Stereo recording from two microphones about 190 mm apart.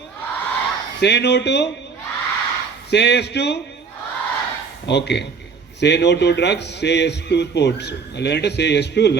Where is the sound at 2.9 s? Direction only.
60° left (ahead or behind).